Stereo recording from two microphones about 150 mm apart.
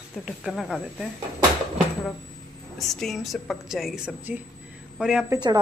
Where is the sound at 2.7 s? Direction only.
Centre (ahead or behind).